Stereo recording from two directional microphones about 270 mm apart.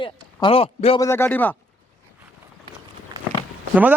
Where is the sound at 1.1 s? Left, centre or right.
Centre.